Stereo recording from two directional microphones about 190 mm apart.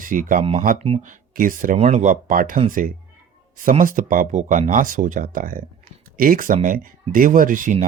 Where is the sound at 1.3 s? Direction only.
45° right (ahead or behind).